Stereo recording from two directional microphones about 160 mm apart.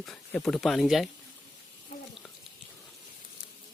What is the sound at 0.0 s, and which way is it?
Speech, 5° left (ahead or behind).